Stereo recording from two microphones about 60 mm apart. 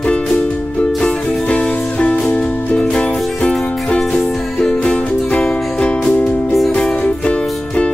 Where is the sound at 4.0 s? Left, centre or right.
Centre; by 6.5 s left.